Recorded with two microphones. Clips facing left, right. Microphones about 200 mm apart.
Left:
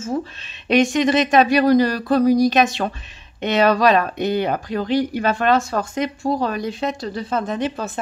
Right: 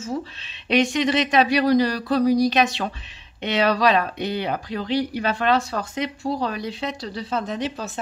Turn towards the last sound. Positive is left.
turn(degrees=50)  # may be behind; listen again after turning